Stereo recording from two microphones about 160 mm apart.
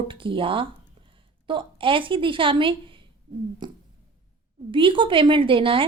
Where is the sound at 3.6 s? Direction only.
25° right (ahead or behind).